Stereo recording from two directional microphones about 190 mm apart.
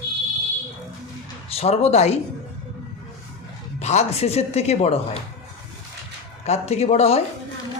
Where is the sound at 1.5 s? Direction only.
35° left (ahead or behind).